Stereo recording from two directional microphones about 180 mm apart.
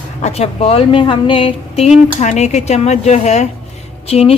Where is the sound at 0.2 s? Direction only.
35° left (ahead or behind).